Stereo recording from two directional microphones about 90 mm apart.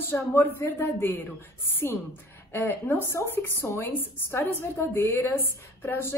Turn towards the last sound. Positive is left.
turn(degrees=25)  # may be behind; listen again after turning